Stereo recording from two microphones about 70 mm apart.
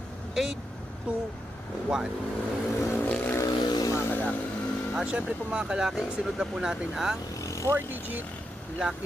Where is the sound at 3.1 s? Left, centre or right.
Left.